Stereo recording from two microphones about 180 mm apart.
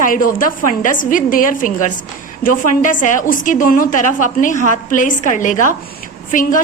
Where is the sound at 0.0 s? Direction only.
50° left (ahead or behind).